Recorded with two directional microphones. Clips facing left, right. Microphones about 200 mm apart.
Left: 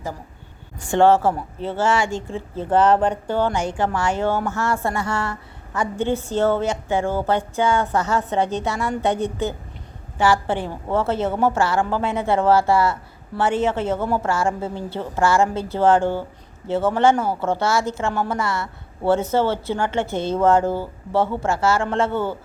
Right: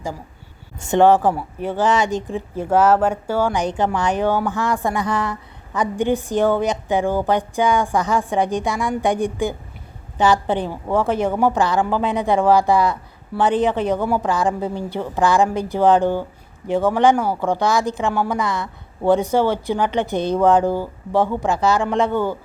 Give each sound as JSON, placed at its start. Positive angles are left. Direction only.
{"t": 0.8, "sound": "a woman's voice", "side_deg": -20}